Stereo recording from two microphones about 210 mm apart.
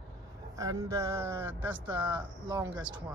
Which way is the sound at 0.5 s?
15° right (ahead or behind).